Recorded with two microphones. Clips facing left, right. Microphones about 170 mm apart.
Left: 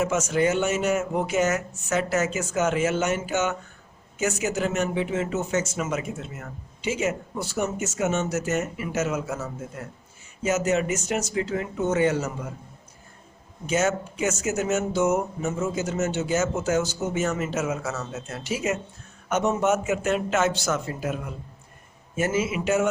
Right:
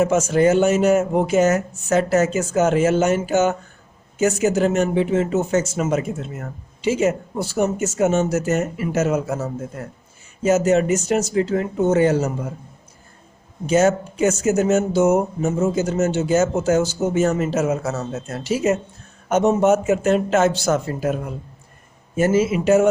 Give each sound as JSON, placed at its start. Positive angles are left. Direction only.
{"t": 0.0, "sound": "speech", "side_deg": -35}
{"t": 10.4, "sound": "speech", "side_deg": -30}
{"t": 13.7, "sound": "speech", "side_deg": -35}